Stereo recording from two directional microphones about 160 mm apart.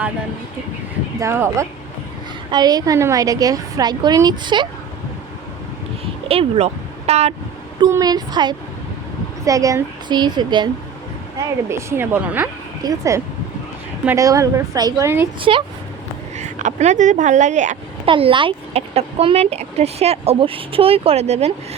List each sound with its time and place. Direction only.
1.2 s a woman's voice: 15° right (ahead or behind)
6.2 s speech: 40° right (ahead or behind)
7.8 s a woman's voice: 20° right (ahead or behind)
11.3 s a woman's voice: 15° right (ahead or behind)
15.4 s speech: 35° right (ahead or behind)
16.4 s a woman's voice: 50° right (ahead or behind)
18.0 s speech: 35° right (ahead or behind)